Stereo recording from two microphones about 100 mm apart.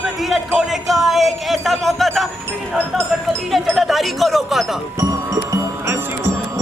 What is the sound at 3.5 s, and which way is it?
Speech, centre (ahead or behind).